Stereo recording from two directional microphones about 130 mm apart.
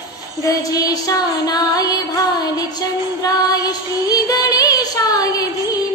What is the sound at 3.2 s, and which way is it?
Child singing, 30° left (ahead or behind).